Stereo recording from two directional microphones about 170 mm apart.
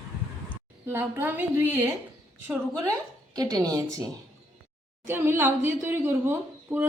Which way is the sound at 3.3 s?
20° right (ahead or behind).